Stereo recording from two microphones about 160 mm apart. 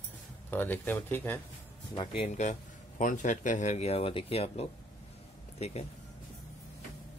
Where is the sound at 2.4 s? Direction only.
45° left (ahead or behind).